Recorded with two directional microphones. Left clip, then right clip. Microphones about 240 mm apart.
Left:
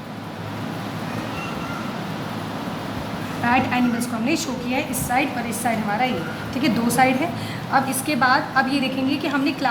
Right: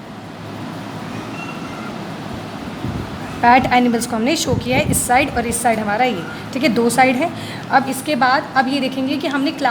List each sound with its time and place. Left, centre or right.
3.4 s a woman's voice: right